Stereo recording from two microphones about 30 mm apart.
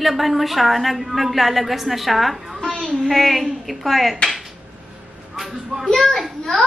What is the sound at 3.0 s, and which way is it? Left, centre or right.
A woman's voice, centre.